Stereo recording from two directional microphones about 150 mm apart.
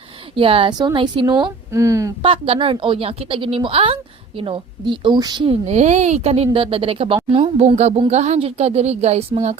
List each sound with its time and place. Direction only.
0.3 s a woman's voice: 35° right (ahead or behind)
1.7 s speech: 20° right (ahead or behind)
2.2 s a woman's voice: 35° right (ahead or behind)
5.6 s speech: 50° right (ahead or behind)